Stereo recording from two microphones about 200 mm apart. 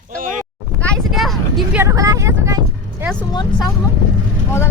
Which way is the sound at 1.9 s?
15° right (ahead or behind).